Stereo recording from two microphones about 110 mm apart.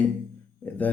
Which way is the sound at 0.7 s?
15° left (ahead or behind).